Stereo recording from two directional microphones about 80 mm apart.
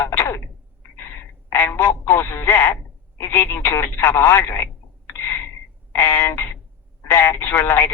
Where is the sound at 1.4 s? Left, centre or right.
Left.